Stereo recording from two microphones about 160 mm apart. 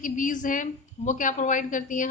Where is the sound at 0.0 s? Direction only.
55° left (ahead or behind).